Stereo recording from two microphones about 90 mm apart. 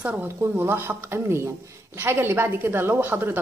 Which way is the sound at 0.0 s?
15° right (ahead or behind).